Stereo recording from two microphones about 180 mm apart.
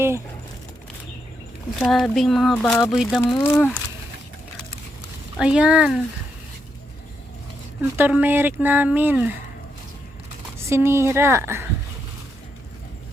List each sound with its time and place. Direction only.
1.8 s speech: centre (ahead or behind)
2.9 s speech: centre (ahead or behind)
3.2 s speech: 20° left (ahead or behind)
5.4 s speech: 5° right (ahead or behind)
7.8 s speech: 10° right (ahead or behind)
10.7 s speech: 15° right (ahead or behind)